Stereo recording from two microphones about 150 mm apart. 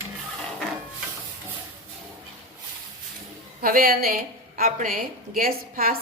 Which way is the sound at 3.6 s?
80° right.